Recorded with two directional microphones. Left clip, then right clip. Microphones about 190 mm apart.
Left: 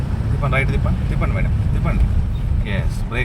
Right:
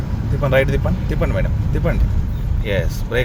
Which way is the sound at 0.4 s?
45° right (ahead or behind).